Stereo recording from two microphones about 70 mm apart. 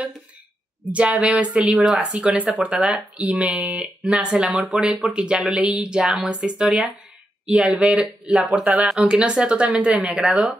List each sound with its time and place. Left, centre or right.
0.9 s speech: centre